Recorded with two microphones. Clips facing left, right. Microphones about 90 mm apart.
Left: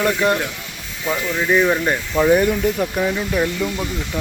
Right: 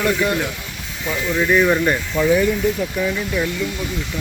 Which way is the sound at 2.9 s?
25° left (ahead or behind).